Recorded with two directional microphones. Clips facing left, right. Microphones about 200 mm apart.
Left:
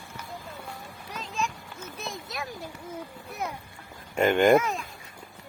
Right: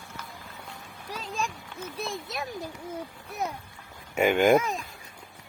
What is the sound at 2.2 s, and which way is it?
Speech, 20° right (ahead or behind).